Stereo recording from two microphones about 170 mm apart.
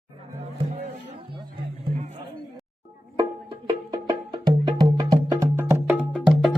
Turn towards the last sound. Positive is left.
turn(degrees=0)  # may be behind; listen again after turning